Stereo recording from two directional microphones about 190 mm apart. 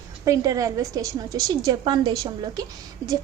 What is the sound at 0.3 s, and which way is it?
A woman's voice, 15° right (ahead or behind).